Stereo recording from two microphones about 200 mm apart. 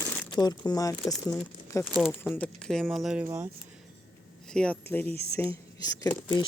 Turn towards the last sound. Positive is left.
turn(degrees=20)  # may be behind; listen again after turning